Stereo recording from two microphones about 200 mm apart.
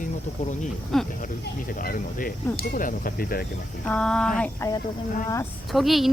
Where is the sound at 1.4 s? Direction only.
45° left (ahead or behind).